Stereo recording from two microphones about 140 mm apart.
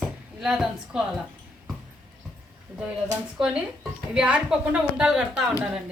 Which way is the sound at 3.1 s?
5° right (ahead or behind).